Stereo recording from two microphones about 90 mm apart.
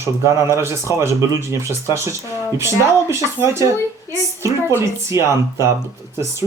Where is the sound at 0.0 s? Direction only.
35° right (ahead or behind).